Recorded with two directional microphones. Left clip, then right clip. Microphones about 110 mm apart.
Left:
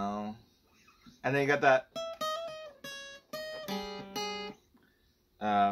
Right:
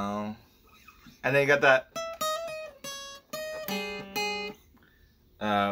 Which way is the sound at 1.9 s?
30° left (ahead or behind).